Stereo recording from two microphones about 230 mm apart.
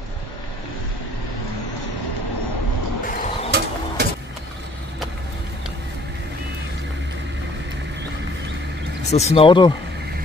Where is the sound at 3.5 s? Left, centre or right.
Right.